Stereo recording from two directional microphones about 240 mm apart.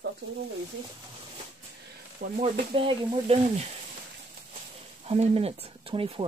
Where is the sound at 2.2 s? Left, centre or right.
Right.